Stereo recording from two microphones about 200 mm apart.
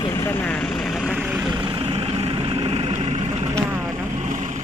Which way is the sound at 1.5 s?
25° right (ahead or behind).